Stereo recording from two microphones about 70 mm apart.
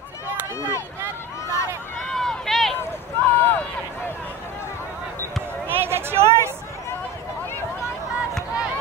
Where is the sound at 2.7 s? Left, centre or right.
Left.